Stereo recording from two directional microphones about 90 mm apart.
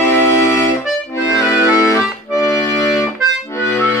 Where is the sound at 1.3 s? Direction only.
35° left (ahead or behind).